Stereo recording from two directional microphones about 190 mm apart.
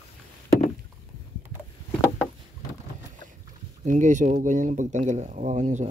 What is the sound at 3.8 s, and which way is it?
Speech, 40° right (ahead or behind).